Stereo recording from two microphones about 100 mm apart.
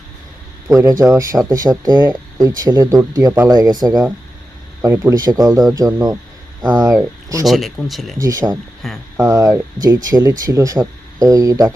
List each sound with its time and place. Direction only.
0.7 s speech: 30° right (ahead or behind)
4.8 s speech: 30° right (ahead or behind)
7.4 s speech: centre (ahead or behind)
8.2 s speech: 35° right (ahead or behind)
8.8 s speech: centre (ahead or behind)
9.3 s speech: 35° right (ahead or behind)